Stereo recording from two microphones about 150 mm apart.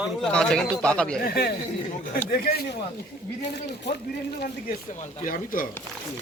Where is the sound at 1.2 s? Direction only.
90° left.